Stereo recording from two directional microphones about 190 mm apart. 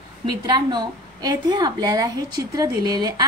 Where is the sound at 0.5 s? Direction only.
20° right (ahead or behind).